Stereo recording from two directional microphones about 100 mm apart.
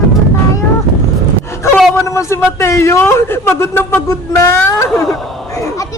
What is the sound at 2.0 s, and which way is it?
A man's voice, 30° left (ahead or behind).